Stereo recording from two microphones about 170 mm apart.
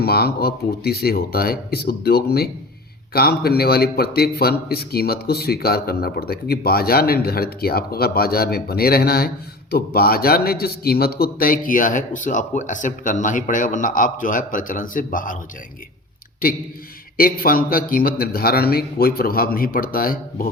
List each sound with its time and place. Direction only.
0.0 s a man's voice: 65° left (ahead or behind)
17.2 s a man's voice: 60° left (ahead or behind)